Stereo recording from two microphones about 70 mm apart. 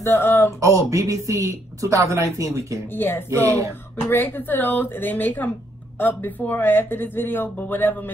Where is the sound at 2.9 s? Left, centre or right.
Left.